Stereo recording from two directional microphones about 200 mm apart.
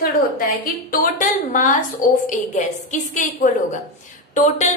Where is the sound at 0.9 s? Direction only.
40° left (ahead or behind).